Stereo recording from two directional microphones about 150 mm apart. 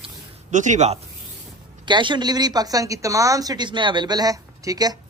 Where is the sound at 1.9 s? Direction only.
30° right (ahead or behind).